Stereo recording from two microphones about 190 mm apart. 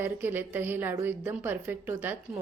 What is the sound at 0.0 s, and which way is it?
A woman's voice, 10° right (ahead or behind).